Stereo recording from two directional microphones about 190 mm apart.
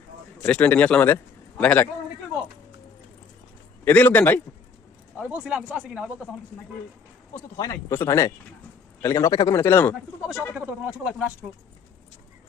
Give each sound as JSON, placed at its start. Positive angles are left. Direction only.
{"t": 0.4, "sound": "a man's voice", "side_deg": 10}
{"t": 3.8, "sound": "a man's voice", "side_deg": 10}
{"t": 5.1, "sound": "speech", "side_deg": -5}
{"t": 7.5, "sound": "a man's voice", "side_deg": 20}
{"t": 10.5, "sound": "speech", "side_deg": -10}